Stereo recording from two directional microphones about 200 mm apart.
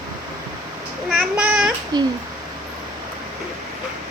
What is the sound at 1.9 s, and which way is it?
Babbling, 20° right (ahead or behind).